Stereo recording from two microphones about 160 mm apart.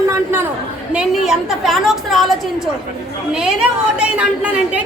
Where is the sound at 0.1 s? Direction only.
15° right (ahead or behind).